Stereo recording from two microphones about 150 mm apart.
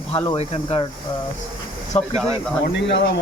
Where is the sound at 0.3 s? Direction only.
40° left (ahead or behind).